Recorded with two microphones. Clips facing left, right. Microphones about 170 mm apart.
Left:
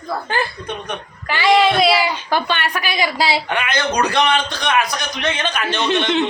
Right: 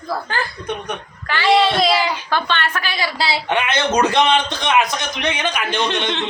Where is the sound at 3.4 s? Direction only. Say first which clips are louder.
Right 2 dB; 25° right (ahead or behind).